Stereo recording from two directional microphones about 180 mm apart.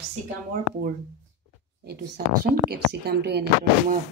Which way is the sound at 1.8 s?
60° right (ahead or behind).